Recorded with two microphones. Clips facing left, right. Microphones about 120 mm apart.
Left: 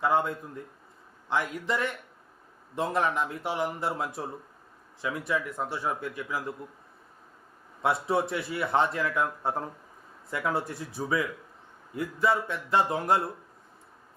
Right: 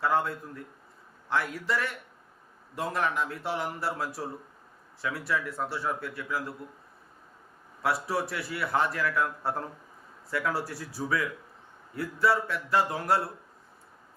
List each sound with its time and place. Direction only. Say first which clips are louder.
0.0 s a man's voice: left 1 dB; 15° left (ahead or behind)
7.8 s a man's voice: left 3 dB; 20° left (ahead or behind)